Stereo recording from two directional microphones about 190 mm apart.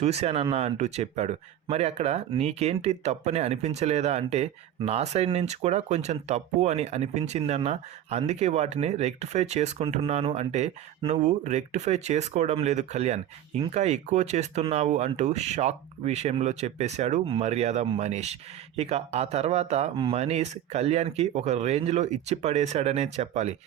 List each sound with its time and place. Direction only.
0.0 s speech: 35° right (ahead or behind)